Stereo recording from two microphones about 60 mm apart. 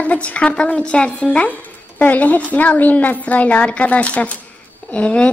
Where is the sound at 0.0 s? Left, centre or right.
Left.